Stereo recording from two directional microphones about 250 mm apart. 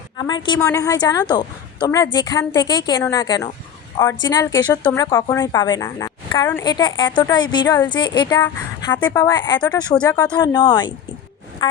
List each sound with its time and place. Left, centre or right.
0.2 s a woman's voice: centre